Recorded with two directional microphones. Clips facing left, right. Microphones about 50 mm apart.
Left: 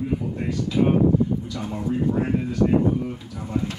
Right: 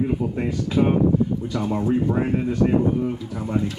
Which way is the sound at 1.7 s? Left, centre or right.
Right.